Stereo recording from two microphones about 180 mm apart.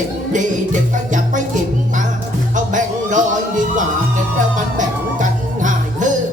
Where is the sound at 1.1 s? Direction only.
45° right (ahead or behind).